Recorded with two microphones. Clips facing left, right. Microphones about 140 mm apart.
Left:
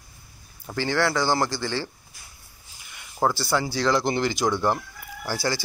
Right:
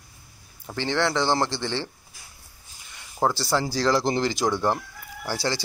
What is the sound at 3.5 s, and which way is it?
Speech, 35° right (ahead or behind).